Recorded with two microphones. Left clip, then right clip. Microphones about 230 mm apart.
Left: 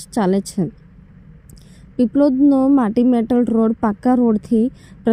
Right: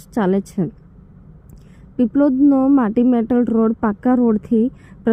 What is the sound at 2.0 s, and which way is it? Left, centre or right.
Speech, left.